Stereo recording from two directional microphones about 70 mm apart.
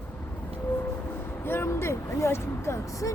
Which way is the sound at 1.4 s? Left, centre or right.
Left.